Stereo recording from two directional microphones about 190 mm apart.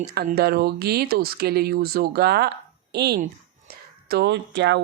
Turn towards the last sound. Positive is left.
turn(degrees=-65)  # may be behind; listen again after turning